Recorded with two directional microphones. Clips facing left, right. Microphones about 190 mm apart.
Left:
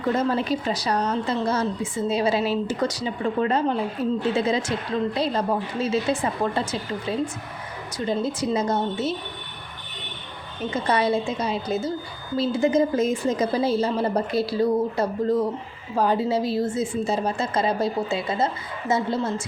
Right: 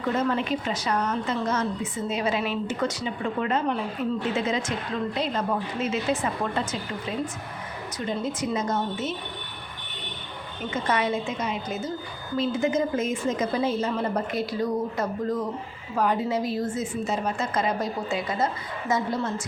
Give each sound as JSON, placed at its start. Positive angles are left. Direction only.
{"t": 0.2, "sound": "a woman's voice", "side_deg": 35}
{"t": 7.9, "sound": "a woman's voice", "side_deg": 35}
{"t": 10.8, "sound": "a woman's voice", "side_deg": 35}